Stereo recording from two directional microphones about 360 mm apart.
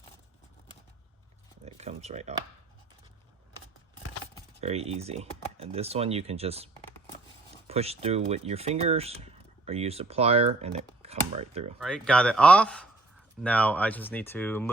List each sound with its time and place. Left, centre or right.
1.6 s speech: centre
4.6 s speech: centre
7.7 s speech: centre
11.8 s speech: centre